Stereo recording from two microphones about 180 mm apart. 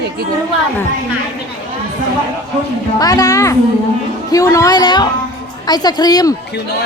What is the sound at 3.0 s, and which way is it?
Speech, 20° left (ahead or behind).